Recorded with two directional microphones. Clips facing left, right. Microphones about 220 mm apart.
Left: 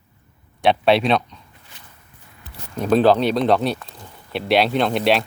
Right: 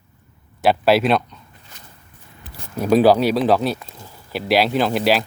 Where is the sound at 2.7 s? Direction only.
10° right (ahead or behind).